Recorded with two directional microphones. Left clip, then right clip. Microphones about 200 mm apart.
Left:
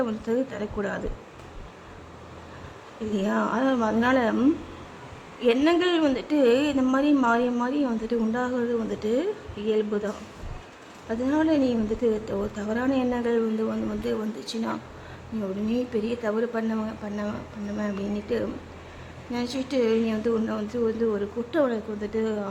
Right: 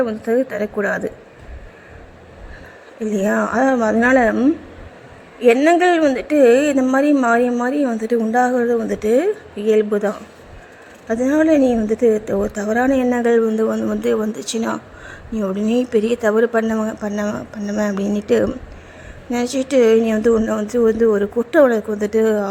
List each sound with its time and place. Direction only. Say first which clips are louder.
0.0 s speech: right 9 dB; 15° right (ahead or behind)
3.1 s a woman's voice: right 8 dB; 20° right (ahead or behind)